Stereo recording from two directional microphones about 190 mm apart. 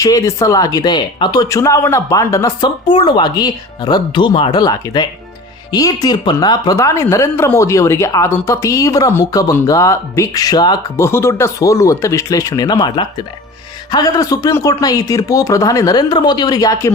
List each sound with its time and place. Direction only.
0.0 s speech: 15° left (ahead or behind)